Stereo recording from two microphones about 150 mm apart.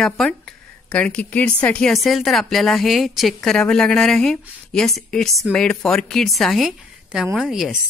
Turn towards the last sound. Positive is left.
turn(degrees=-5)  # may be behind; listen again after turning